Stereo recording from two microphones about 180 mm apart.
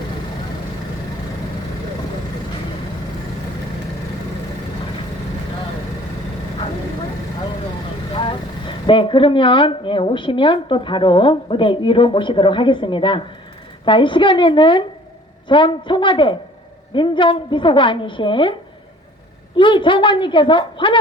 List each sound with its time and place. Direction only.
8.1 s vehicle: 30° left (ahead or behind)
8.9 s a woman's voice: 30° left (ahead or behind)
19.5 s a woman's voice: 25° left (ahead or behind)